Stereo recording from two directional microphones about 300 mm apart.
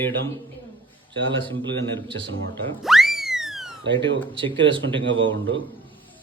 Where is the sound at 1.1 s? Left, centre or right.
Right.